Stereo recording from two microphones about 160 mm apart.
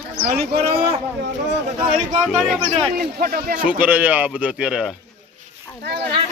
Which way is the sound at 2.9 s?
70° right (ahead or behind).